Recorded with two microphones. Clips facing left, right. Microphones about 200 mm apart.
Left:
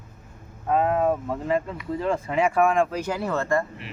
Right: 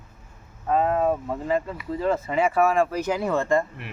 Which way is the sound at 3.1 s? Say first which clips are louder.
Right 2 dB; 15° right (ahead or behind).